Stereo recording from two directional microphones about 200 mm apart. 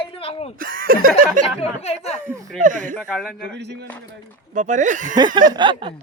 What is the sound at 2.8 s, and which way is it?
Speech, 5° left (ahead or behind).